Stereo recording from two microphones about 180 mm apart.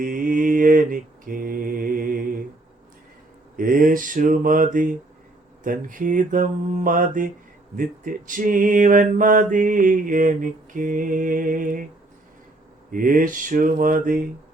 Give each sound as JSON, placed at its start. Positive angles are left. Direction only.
{"t": 0.0, "sound": "mantra", "side_deg": -50}
{"t": 3.6, "sound": "mantra", "side_deg": -50}
{"t": 12.9, "sound": "mantra", "side_deg": -50}